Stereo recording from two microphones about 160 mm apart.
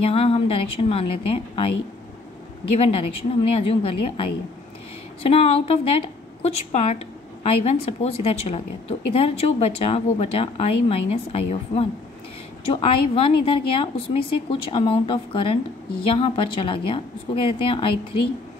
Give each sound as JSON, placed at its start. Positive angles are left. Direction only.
{"t": 0.0, "sound": "a woman's voice", "side_deg": 40}
{"t": 3.5, "sound": "a woman's voice", "side_deg": 35}